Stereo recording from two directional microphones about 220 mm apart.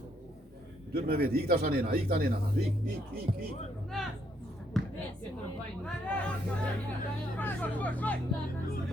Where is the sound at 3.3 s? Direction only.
30° right (ahead or behind).